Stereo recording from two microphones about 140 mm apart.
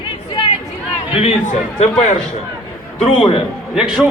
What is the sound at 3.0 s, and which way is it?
Speech, 40° left (ahead or behind).